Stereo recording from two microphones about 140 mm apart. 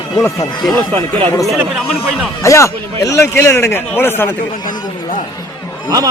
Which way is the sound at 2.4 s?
20° left (ahead or behind).